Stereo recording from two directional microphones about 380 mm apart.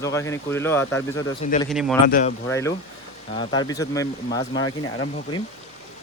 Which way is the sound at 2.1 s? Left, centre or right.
Centre.